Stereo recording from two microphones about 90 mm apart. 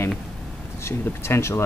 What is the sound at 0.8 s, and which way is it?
Speech, 30° left (ahead or behind).